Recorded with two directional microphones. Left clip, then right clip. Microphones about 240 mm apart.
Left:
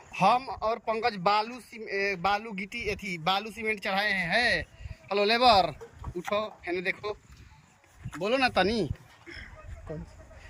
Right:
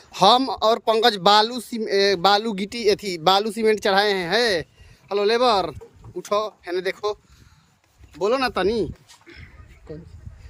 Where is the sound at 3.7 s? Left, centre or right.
Right.